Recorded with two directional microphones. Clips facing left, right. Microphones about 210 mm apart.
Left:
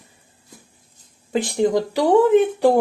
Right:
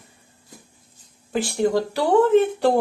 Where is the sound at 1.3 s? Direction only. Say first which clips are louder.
Left 2 dB; 20° left (ahead or behind).